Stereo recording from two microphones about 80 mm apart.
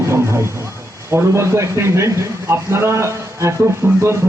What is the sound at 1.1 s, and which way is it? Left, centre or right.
A man's voice, right.